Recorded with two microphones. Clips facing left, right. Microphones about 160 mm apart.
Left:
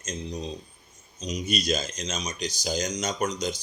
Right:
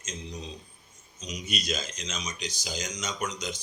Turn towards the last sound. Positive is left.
turn(degrees=35)  # may be behind; listen again after turning